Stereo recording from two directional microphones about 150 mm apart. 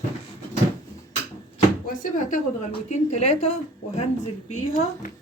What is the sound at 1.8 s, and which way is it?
A woman's voice, 65° left (ahead or behind).